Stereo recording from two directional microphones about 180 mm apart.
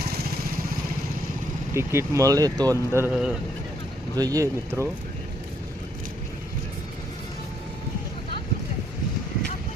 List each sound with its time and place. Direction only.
0.0 s vehicle: 60° right (ahead or behind)
1.7 s speech: 15° right (ahead or behind)
3.1 s a man's voice: 5° right (ahead or behind)
4.2 s speech: 20° right (ahead or behind)